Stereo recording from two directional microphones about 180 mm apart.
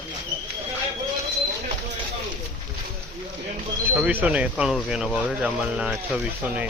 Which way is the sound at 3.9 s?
10° right (ahead or behind).